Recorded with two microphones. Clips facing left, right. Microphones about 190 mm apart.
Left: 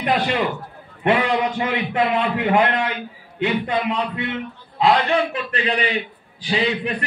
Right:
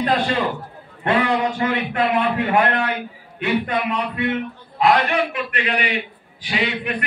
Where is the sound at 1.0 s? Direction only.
20° left (ahead or behind).